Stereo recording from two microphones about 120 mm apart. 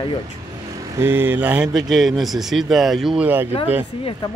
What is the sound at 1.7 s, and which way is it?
Speech, centre (ahead or behind).